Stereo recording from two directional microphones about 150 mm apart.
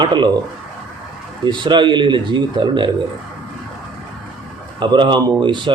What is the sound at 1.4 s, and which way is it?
Speech, 30° right (ahead or behind).